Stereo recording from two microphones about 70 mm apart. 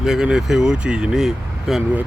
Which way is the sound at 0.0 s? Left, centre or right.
Centre.